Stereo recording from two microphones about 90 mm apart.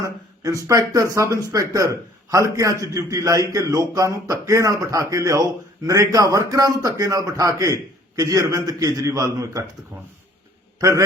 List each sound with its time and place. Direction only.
0.7 s speech: 40° right (ahead or behind)
10.8 s a man's voice: 40° right (ahead or behind)